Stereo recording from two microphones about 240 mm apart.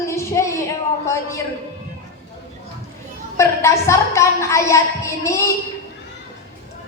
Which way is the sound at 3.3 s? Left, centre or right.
Centre.